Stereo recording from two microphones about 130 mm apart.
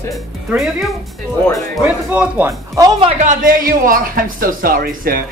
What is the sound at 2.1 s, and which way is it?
Speech, 10° right (ahead or behind).